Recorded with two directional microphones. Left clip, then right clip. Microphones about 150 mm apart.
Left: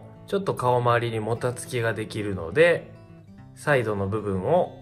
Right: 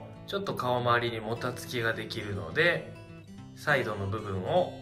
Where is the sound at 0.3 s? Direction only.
50° left (ahead or behind).